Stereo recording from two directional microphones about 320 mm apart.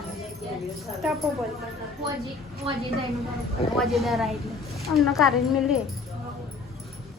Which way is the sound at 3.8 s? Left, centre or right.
Centre.